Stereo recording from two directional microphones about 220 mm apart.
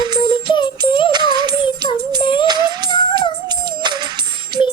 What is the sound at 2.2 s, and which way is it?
Music, 20° left (ahead or behind).